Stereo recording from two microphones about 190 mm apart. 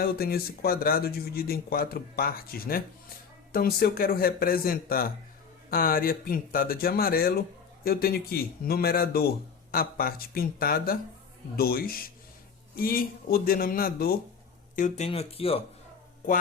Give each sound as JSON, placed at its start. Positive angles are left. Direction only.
{"t": 0.0, "sound": "speech", "side_deg": 55}
{"t": 14.8, "sound": "speech", "side_deg": 40}